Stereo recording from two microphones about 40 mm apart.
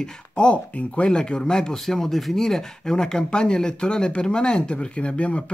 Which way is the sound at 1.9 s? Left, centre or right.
Centre.